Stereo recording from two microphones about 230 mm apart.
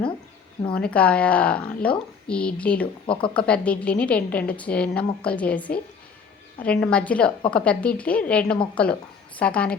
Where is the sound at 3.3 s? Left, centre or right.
Centre.